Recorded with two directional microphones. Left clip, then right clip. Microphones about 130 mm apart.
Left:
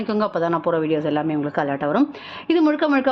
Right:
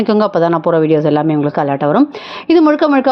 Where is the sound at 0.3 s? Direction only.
40° right (ahead or behind).